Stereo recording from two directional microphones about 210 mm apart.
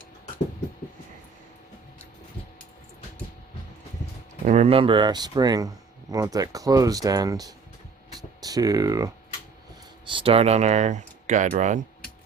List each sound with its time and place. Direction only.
4.4 s speech: 30° right (ahead or behind); by 9.0 s 15° right (ahead or behind)
10.1 s speech: 25° right (ahead or behind)